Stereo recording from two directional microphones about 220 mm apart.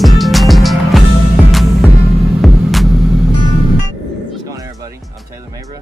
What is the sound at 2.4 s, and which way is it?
Vehicle, centre (ahead or behind).